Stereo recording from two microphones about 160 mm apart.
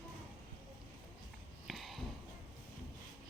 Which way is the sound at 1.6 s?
Centre (ahead or behind).